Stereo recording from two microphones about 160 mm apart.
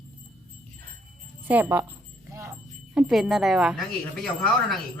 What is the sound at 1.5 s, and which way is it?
Speech, 15° right (ahead or behind).